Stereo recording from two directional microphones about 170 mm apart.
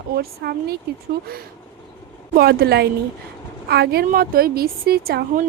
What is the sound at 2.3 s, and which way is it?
A woman's voice, 65° right (ahead or behind).